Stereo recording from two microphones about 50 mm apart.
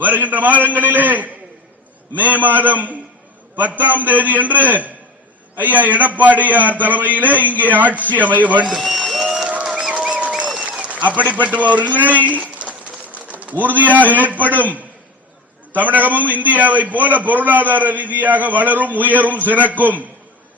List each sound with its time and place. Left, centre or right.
0.0 s a man's voice: right
8.6 s a man's voice: centre
9.1 s applause: centre
9.9 s applause: right
10.7 s a man's voice: right
12.3 s bird: right
13.4 s a man's voice: right